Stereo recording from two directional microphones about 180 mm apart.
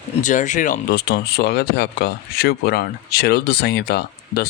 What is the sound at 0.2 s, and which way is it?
Speech, 45° left (ahead or behind).